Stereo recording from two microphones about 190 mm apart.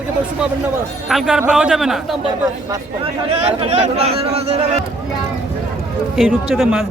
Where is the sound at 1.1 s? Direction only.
5° right (ahead or behind).